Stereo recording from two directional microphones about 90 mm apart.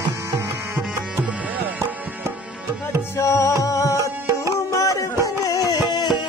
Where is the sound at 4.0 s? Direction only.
40° right (ahead or behind).